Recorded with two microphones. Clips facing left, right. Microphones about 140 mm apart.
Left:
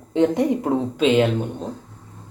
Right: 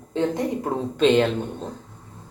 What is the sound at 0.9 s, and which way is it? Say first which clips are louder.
Speech: right 1 dB; 5° left (ahead or behind).